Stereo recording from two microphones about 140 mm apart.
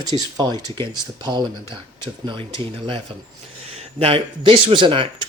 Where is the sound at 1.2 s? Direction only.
30° right (ahead or behind).